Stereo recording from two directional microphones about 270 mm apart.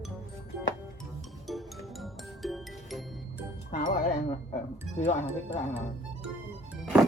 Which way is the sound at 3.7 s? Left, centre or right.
Left.